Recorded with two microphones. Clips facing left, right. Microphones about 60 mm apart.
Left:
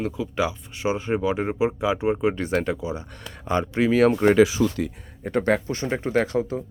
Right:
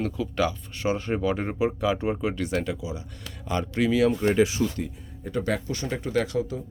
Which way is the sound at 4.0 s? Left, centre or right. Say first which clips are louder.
Left 6 dB; left.